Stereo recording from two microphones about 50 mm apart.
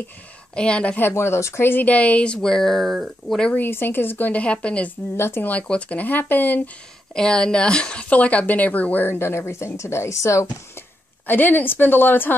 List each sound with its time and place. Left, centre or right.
0.6 s speech: left
1.1 s speech: left
1.7 s speech: left; by 3.3 s centre
3.5 s speech: left
4.3 s speech: left
5.1 s speech: left
5.4 s a woman's voice: left
7.2 s speech: centre; by 9.2 s left
9.2 s a woman's voice: left
11.2 s a woman's voice: left